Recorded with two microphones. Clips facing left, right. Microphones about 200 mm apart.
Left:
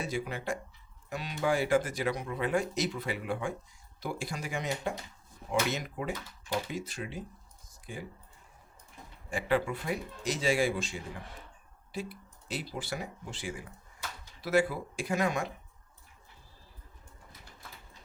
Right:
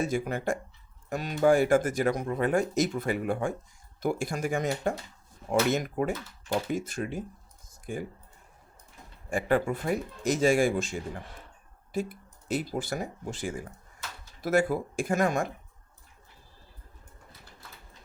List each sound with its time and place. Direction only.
0.0 s speech: 45° right (ahead or behind)
9.3 s speech: 45° right (ahead or behind)